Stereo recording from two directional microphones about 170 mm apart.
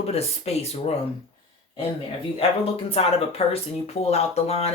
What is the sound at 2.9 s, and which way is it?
Speech, 35° left (ahead or behind).